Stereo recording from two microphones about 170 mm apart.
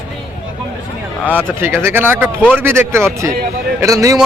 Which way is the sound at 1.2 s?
10° left (ahead or behind).